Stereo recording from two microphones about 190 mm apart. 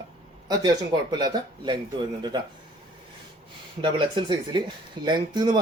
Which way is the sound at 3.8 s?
25° right (ahead or behind).